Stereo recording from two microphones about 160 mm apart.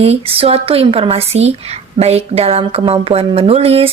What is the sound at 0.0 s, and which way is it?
A woman's voice, 35° right (ahead or behind).